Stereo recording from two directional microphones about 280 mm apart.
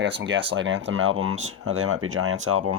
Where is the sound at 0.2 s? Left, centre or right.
Right.